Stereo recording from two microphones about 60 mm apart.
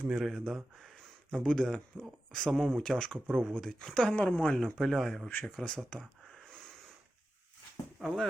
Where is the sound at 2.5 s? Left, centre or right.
Centre.